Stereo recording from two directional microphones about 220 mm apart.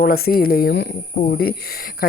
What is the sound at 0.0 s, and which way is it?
Speech, 45° left (ahead or behind).